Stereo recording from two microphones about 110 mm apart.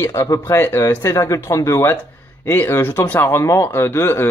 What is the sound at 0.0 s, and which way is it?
Speech, 25° left (ahead or behind).